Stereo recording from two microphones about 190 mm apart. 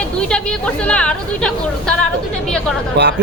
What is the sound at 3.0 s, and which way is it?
Speech, 60° right (ahead or behind).